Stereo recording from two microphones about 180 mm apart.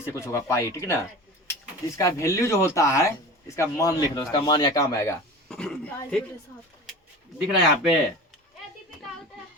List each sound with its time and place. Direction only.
0.0 s speech: 15° left (ahead or behind)
5.5 s speech: 5° left (ahead or behind)
7.3 s speech: 5° right (ahead or behind)